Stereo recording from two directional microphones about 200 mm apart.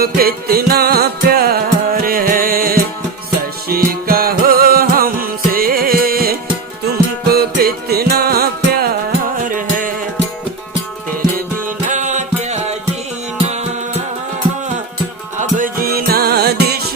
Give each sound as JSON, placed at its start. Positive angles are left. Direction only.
{"t": 0.0, "sound": "music", "side_deg": -50}
{"t": 11.9, "sound": "music", "side_deg": -40}
{"t": 15.4, "sound": "music", "side_deg": -40}